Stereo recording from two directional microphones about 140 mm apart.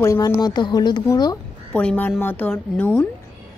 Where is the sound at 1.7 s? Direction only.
10° left (ahead or behind).